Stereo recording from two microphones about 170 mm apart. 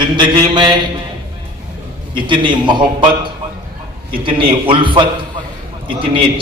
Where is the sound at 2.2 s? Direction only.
30° right (ahead or behind).